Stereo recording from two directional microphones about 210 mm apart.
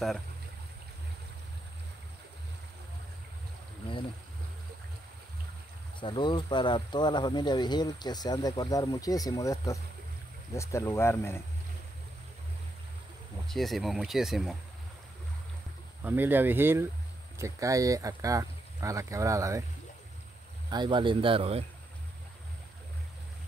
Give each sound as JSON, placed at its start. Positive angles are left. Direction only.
{"t": 5.9, "sound": "speech", "side_deg": 25}
{"t": 13.5, "sound": "speech", "side_deg": 0}
{"t": 16.0, "sound": "speech", "side_deg": -10}
{"t": 20.7, "sound": "speech", "side_deg": -20}